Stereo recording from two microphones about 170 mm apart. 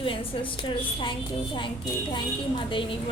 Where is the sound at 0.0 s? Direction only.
30° left (ahead or behind).